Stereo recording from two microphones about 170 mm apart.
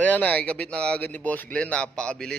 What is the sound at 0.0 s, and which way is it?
Speech, 10° left (ahead or behind).